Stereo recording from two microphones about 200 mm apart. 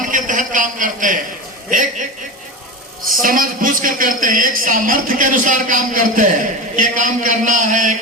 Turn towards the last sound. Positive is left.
turn(degrees=-40)  # may be behind; listen again after turning